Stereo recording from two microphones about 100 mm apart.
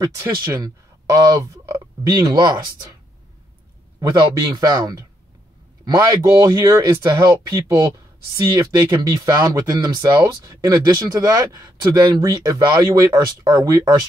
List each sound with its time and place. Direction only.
0.0 s speech: 30° right (ahead or behind)
4.1 s speech: 40° right (ahead or behind)
10.1 s speech: 30° right (ahead or behind)